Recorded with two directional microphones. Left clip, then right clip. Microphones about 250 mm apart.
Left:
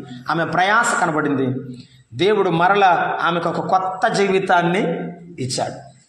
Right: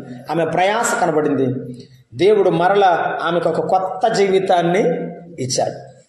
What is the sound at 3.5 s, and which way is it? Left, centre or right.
Speech, left.